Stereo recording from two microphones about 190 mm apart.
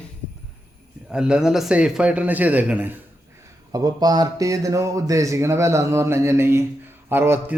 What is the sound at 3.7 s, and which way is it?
A man's voice, 20° right (ahead or behind).